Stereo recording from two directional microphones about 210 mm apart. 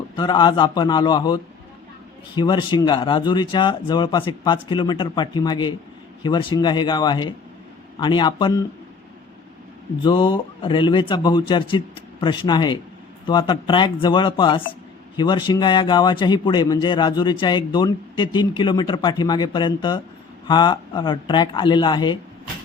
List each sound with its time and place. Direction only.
0.2 s a man's voice: 20° left (ahead or behind)
10.0 s a man's voice: 20° left (ahead or behind)